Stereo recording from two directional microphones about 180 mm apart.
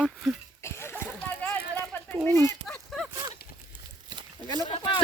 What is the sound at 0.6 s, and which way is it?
Splash, 15° left (ahead or behind).